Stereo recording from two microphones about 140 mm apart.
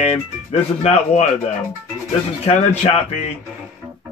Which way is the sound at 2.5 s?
45° left (ahead or behind).